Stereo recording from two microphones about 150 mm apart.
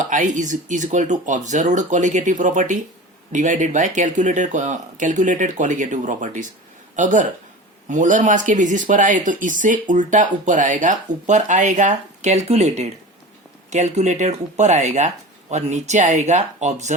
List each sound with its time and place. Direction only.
0.0 s speech: 60° right (ahead or behind)